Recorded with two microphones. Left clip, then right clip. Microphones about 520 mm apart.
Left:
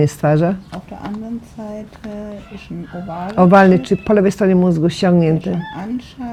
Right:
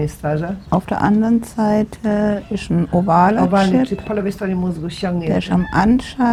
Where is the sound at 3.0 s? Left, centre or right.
Right.